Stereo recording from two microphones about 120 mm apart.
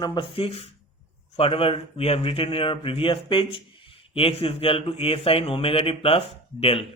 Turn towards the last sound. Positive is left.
turn(degrees=55)  # may be behind; listen again after turning